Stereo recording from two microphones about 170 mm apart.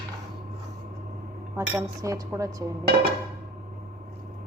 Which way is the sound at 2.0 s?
20° right (ahead or behind).